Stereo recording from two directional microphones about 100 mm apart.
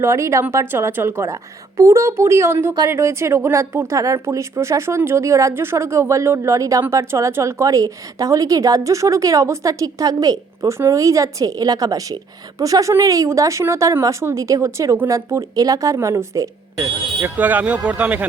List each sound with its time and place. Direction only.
0.0 s a woman's voice: 30° right (ahead or behind)
17.2 s speech: 15° right (ahead or behind)